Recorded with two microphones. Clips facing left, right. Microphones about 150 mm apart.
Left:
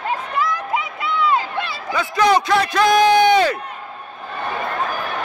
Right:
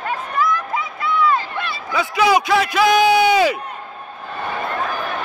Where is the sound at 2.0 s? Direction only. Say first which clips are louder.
Even; 5° right (ahead or behind).